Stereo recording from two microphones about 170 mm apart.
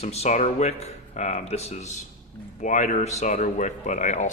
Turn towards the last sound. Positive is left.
turn(degrees=45)  # may be behind; listen again after turning